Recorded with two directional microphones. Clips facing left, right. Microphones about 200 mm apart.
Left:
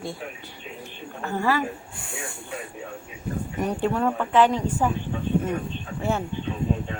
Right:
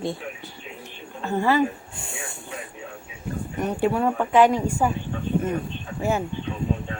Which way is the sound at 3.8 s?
10° right (ahead or behind).